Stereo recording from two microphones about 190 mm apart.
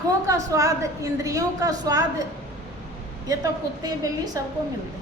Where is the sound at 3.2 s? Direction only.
20° right (ahead or behind).